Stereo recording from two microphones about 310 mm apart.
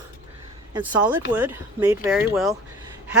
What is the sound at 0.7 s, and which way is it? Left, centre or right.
Speech, centre.